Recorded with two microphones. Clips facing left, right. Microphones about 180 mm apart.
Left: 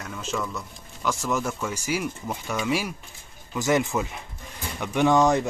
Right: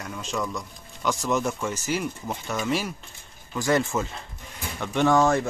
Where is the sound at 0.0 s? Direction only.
Centre (ahead or behind).